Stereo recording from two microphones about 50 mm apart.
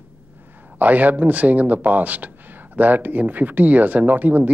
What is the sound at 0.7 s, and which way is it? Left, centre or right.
Speech, right.